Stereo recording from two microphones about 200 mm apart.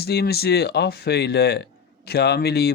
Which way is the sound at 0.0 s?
50° left (ahead or behind).